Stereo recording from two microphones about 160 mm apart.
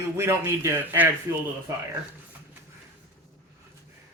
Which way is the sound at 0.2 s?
15° right (ahead or behind).